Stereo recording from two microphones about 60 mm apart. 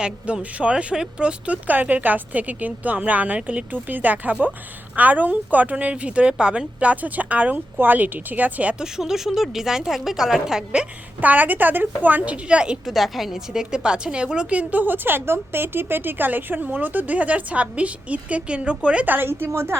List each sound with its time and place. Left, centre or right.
0.0 s a woman's voice: centre
8.8 s speech: centre
11.2 s a woman's voice: right
12.8 s a woman's voice: centre
19.0 s a woman's voice: right